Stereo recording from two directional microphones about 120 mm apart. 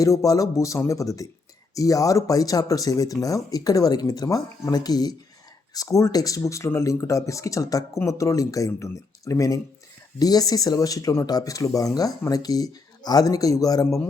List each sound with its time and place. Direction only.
0.0 s speech: 30° left (ahead or behind)